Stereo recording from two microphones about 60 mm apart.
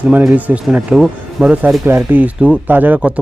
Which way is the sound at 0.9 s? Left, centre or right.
Centre.